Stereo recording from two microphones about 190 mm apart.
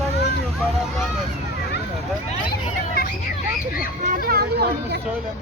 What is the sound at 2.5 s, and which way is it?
Hubbub, 55° left (ahead or behind).